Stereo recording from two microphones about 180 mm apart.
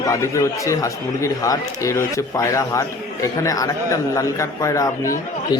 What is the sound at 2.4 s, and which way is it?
Speech, 15° left (ahead or behind).